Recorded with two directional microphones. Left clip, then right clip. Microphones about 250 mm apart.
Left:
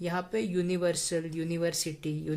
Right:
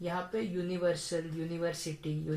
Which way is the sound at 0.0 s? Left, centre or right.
Left.